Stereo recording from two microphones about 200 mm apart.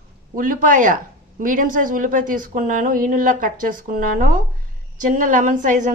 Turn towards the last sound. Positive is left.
turn(degrees=-40)  # may be behind; listen again after turning